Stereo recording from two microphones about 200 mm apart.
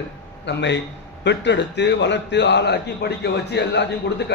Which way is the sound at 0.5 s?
60° left (ahead or behind).